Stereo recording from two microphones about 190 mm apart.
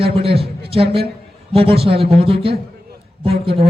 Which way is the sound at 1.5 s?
30° right (ahead or behind).